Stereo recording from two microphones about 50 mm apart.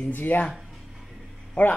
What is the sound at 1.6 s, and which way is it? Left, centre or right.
Speech, left.